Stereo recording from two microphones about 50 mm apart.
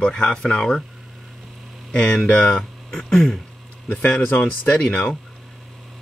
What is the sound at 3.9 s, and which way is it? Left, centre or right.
Speech, left.